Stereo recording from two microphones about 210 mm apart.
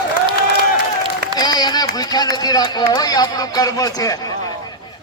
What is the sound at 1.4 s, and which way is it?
Speech, 20° left (ahead or behind).